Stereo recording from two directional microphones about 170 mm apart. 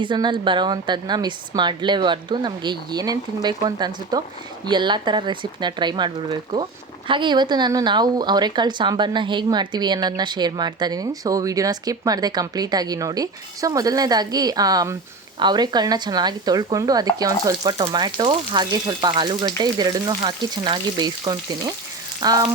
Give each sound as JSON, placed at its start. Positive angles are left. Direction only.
{"t": 0.0, "sound": "a woman's voice", "side_deg": -25}